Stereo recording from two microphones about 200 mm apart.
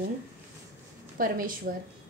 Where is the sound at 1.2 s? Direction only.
45° right (ahead or behind).